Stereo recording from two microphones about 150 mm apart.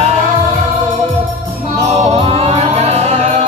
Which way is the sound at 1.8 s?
45° right (ahead or behind).